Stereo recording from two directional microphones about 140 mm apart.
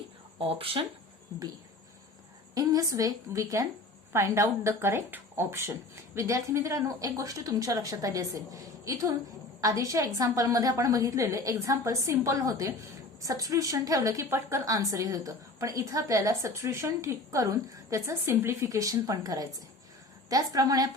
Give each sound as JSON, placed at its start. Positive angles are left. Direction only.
{"t": 0.3, "sound": "speech", "side_deg": -40}
{"t": 2.6, "sound": "a woman's voice", "side_deg": -25}